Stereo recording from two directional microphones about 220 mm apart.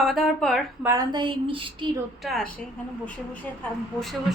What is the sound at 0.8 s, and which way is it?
A woman's voice, 20° right (ahead or behind).